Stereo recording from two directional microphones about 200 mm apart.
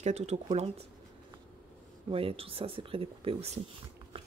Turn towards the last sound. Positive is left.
turn(degrees=-30)  # may be behind; listen again after turning